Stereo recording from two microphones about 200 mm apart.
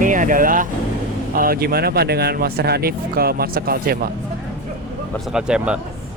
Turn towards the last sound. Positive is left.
turn(degrees=-5)  # may be behind; listen again after turning